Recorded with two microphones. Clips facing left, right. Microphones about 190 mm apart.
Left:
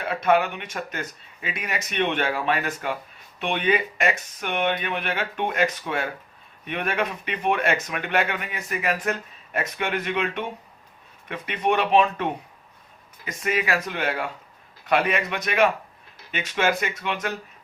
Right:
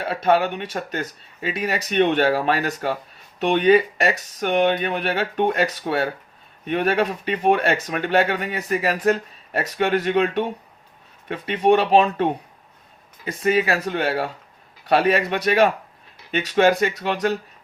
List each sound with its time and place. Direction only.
0.0 s speech: 30° right (ahead or behind)